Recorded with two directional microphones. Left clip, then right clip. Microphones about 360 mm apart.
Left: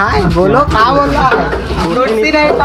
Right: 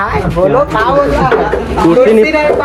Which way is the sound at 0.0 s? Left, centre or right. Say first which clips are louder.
Left 1 dB; left.